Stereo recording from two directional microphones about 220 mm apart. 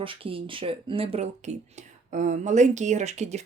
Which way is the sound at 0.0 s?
25° right (ahead or behind).